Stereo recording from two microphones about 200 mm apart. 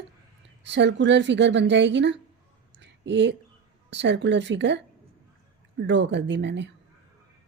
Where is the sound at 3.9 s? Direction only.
60° right (ahead or behind).